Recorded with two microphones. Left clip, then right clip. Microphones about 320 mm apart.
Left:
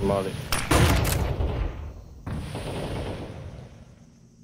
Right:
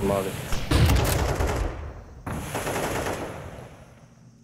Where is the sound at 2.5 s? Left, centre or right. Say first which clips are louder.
Right 6 dB; right.